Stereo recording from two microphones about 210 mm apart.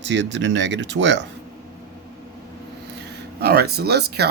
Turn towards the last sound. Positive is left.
turn(degrees=-50)  # may be behind; listen again after turning